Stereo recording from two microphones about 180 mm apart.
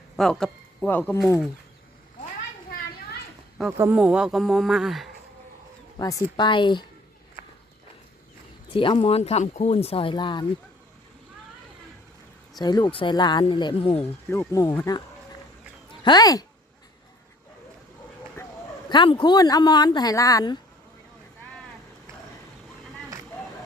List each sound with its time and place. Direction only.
0.2 s speech: centre (ahead or behind)
3.7 s speech: 10° right (ahead or behind)
6.0 s speech: 20° left (ahead or behind)
8.7 s speech: 30° left (ahead or behind)
12.5 s speech: 25° left (ahead or behind)
14.0 s speech: 15° left (ahead or behind)
16.0 s speech: 20° left (ahead or behind)
18.9 s speech: 25° left (ahead or behind)